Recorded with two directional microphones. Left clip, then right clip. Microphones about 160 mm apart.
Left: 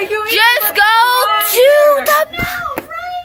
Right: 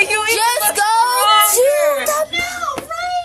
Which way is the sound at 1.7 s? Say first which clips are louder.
Left 6 dB; 30° left (ahead or behind).